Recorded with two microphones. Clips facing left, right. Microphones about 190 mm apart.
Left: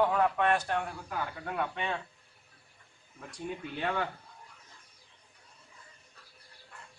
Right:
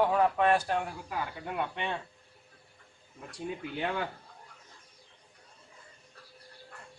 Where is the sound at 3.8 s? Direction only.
10° right (ahead or behind).